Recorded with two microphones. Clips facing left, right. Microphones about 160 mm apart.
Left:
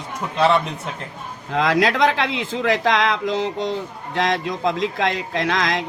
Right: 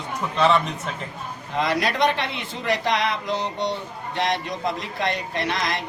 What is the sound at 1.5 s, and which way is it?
Speech, 90° left.